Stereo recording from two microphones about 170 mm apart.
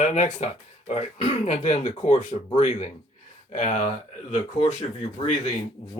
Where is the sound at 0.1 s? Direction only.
40° left (ahead or behind).